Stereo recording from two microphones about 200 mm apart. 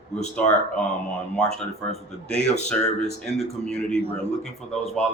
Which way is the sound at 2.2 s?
5° left (ahead or behind).